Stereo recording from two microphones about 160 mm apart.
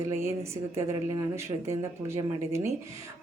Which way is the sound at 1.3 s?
15° right (ahead or behind).